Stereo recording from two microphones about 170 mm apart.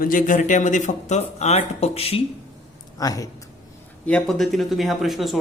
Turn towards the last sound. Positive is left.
turn(degrees=0)  # may be behind; listen again after turning